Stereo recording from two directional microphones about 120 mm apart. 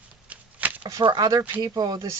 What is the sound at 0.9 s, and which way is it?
Speech, 35° right (ahead or behind).